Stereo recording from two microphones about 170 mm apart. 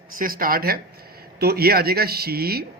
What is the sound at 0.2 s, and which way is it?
Speech, 55° right (ahead or behind).